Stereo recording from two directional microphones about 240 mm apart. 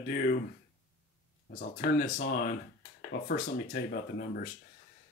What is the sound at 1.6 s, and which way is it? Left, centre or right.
Speech, left.